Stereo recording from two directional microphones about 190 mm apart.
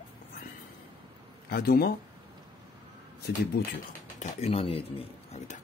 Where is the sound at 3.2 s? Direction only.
55° left (ahead or behind).